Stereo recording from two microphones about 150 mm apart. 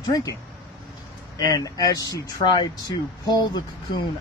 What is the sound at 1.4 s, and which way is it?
Speech, 25° left (ahead or behind).